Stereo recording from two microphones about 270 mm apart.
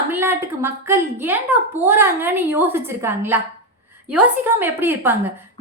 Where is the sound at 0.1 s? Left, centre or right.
Centre.